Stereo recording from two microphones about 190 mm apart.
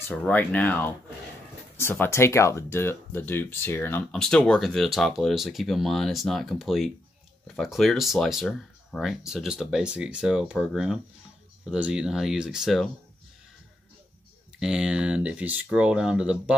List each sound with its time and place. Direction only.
0.1 s speech: 10° left (ahead or behind)
14.6 s speech: 5° right (ahead or behind)